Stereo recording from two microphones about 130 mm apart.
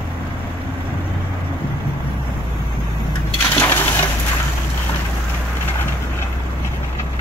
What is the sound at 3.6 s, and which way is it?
Coin, 15° left (ahead or behind).